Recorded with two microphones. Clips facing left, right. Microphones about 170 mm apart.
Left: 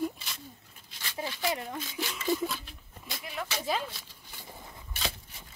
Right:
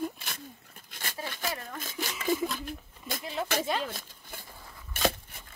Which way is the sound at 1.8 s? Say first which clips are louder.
Even; 45° right (ahead or behind).